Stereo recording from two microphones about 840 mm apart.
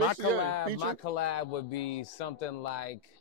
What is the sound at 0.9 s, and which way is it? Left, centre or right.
Speech, left.